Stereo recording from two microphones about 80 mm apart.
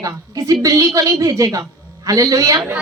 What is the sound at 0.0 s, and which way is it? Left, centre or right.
A woman's voice, right.